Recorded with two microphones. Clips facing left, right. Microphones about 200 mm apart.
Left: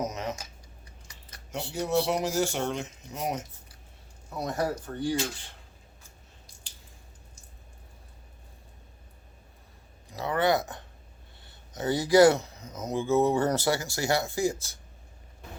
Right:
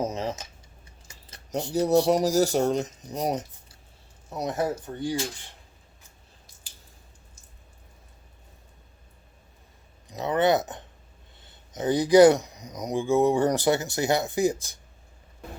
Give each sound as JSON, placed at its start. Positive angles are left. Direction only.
{"t": 0.0, "sound": "a sound", "side_deg": -30}
{"t": 1.0, "sound": "keys jangling", "side_deg": -25}
{"t": 1.7, "sound": "speech", "side_deg": -35}
{"t": 4.4, "sound": "speech", "side_deg": -20}
{"t": 10.1, "sound": "speech", "side_deg": -20}